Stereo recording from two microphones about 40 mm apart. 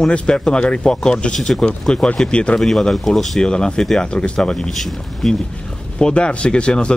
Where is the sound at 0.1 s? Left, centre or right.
Left.